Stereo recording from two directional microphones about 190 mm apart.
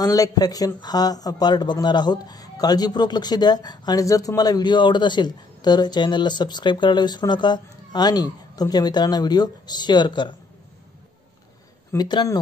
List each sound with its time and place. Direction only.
0.0 s speech: 20° left (ahead or behind)
11.9 s speech: 20° left (ahead or behind)